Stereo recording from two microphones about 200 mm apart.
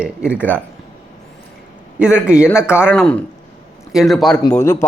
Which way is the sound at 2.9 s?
5° left (ahead or behind).